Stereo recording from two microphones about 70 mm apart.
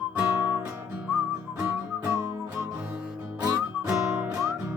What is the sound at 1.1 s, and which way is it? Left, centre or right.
Music, centre.